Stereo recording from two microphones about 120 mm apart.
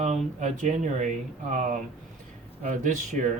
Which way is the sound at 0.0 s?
80° right.